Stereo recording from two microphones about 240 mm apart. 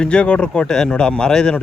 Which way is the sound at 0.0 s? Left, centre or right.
Centre.